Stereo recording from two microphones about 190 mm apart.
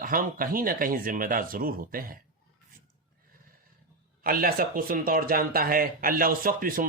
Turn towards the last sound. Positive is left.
turn(degrees=-50)  # may be behind; listen again after turning